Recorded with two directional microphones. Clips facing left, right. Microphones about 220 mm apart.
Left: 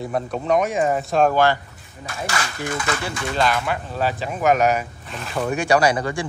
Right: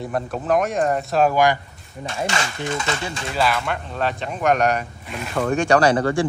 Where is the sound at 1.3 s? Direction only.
15° right (ahead or behind).